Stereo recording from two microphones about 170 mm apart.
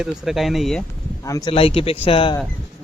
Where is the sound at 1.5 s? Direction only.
35° left (ahead or behind).